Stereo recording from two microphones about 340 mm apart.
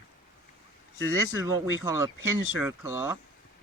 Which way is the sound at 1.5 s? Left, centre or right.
Centre.